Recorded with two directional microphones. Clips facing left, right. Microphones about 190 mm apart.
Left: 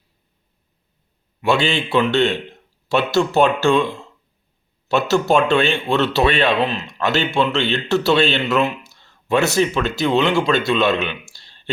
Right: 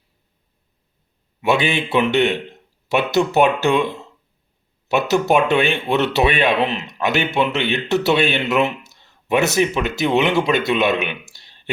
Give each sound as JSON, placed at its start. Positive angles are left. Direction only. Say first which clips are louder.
{"t": 1.4, "sound": "a man's voice", "louder": "even", "side_deg": -20}